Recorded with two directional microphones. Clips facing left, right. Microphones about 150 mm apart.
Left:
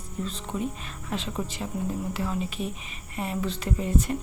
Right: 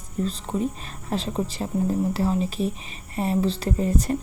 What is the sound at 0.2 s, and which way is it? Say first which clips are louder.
Speech: right 5 dB; 35° right (ahead or behind).